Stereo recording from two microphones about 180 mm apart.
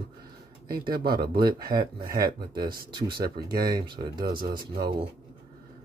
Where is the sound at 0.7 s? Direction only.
55° right (ahead or behind).